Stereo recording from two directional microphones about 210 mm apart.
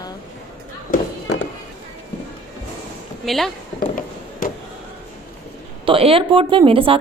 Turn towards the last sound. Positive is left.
turn(degrees=-25)  # may be behind; listen again after turning